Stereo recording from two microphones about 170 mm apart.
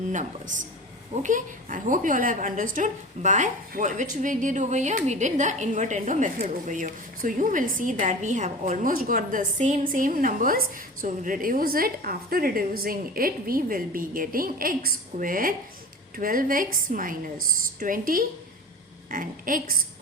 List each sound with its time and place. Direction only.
0.1 s a woman's voice: 45° right (ahead or behind)